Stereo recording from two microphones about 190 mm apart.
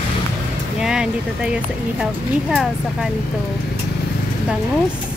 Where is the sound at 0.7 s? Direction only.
5° right (ahead or behind).